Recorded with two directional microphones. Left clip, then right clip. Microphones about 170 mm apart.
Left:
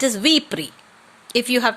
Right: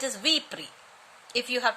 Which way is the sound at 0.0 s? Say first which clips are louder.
Left 9 dB; 30° left (ahead or behind).